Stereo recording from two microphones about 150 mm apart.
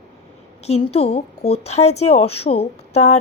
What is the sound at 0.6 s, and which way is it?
A woman's voice, 45° left (ahead or behind).